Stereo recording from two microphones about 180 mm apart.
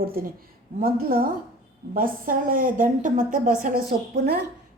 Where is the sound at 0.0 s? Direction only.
55° right (ahead or behind).